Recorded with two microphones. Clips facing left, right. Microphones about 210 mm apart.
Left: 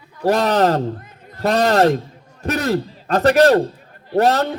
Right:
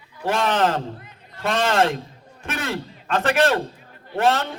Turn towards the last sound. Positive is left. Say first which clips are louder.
# left 5 dB
turn(degrees=40)  # may be behind; listen again after turning